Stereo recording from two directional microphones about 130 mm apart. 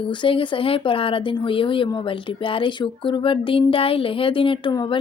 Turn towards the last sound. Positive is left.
turn(degrees=40)  # may be behind; listen again after turning